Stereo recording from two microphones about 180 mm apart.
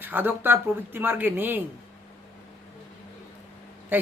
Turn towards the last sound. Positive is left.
turn(degrees=-10)  # may be behind; listen again after turning